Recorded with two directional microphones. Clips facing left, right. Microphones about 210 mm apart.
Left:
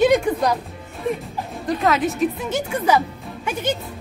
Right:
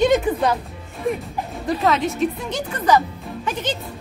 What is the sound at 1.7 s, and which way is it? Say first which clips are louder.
A woman's voice: left 1 dB; centre (ahead or behind).